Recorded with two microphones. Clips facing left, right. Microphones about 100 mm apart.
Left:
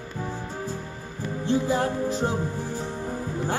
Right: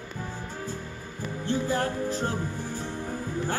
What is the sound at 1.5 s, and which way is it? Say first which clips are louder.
Music: left 4 dB; 15° left (ahead or behind).